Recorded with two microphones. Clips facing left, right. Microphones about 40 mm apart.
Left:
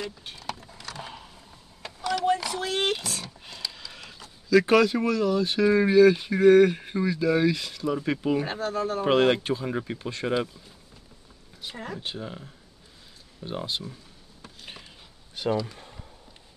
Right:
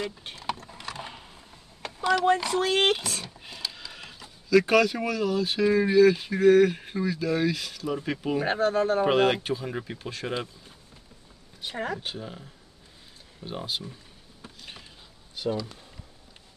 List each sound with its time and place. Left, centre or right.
0.0 s speech: right
0.9 s a sound: centre
2.5 s speech: right
3.3 s a sound: centre
4.5 s speech: centre
8.5 s speech: right
9.0 s speech: centre
11.6 s speech: right
12.2 s speech: centre
15.4 s speech: left